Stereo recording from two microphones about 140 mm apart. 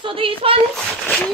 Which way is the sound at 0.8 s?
5° left (ahead or behind).